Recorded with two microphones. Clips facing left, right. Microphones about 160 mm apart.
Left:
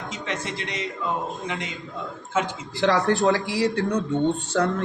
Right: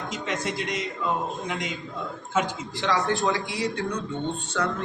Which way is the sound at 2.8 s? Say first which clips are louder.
Left 5 dB; 65° left (ahead or behind).